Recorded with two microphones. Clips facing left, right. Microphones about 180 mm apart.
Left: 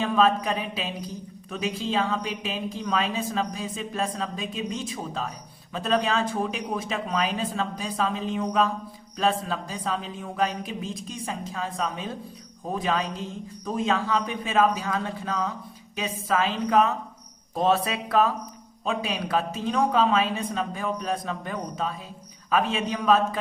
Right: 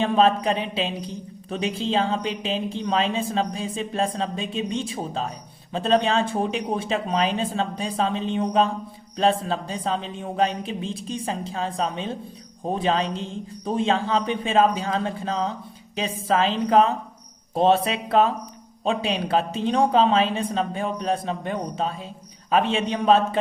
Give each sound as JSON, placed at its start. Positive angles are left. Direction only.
{"t": 0.0, "sound": "a woman's voice", "side_deg": -30}